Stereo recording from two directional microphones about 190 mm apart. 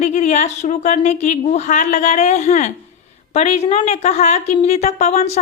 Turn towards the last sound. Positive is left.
turn(degrees=35)  # may be behind; listen again after turning